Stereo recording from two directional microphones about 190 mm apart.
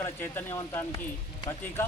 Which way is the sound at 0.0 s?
10° left (ahead or behind).